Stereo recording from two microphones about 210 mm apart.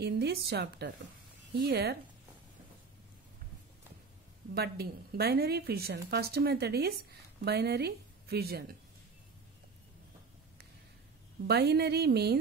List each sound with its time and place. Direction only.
0.0 s a woman's voice: 50° right (ahead or behind)
4.6 s a woman's voice: 50° right (ahead or behind)
11.4 s a woman's voice: 50° right (ahead or behind)